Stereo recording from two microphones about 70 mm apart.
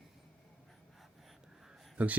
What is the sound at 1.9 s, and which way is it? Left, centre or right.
Speech, right.